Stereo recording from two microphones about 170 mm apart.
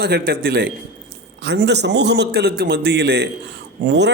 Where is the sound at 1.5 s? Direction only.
90° right.